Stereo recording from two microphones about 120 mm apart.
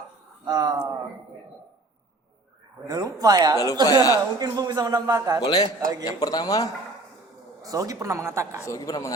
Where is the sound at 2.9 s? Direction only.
30° right (ahead or behind).